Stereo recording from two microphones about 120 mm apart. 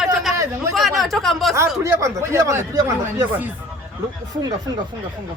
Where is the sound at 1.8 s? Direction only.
25° right (ahead or behind).